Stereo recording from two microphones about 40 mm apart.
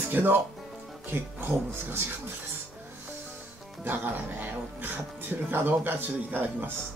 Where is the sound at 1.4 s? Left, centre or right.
Right.